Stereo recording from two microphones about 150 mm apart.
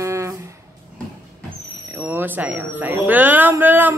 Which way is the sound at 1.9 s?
15° right (ahead or behind).